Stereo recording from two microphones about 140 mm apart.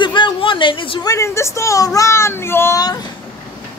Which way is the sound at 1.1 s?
20° left (ahead or behind).